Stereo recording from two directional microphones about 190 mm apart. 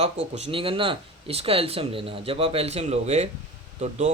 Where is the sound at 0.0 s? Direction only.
35° right (ahead or behind).